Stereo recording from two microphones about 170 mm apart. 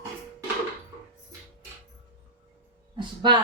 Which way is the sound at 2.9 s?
25° right (ahead or behind).